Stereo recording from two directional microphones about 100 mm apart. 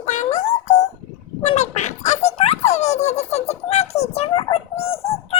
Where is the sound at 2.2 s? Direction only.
90° left.